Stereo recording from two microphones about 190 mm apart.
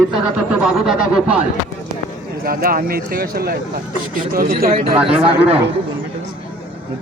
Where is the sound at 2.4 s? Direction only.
50° right (ahead or behind).